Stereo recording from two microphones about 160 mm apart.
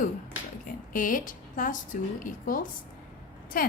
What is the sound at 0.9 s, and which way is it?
A woman's voice, 55° left (ahead or behind).